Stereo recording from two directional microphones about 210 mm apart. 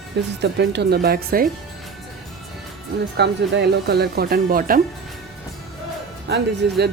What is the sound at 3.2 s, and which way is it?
Speech, 50° right (ahead or behind).